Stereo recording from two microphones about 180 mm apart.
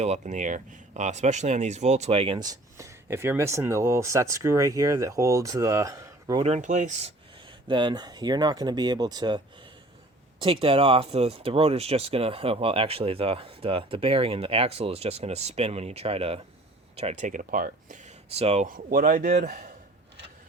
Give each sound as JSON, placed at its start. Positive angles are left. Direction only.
{"t": 0.0, "sound": "speech", "side_deg": -40}
{"t": 6.4, "sound": "speech", "side_deg": -40}
{"t": 7.7, "sound": "speech", "side_deg": -25}
{"t": 10.4, "sound": "speech", "side_deg": -30}
{"t": 18.3, "sound": "speech", "side_deg": -35}